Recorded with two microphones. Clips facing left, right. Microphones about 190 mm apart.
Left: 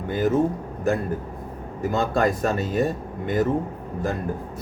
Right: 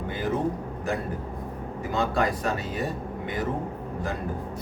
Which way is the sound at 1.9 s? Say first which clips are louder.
Left 4 dB; 45° left (ahead or behind).